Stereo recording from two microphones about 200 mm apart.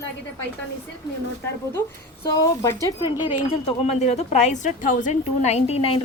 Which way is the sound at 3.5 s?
30° left (ahead or behind).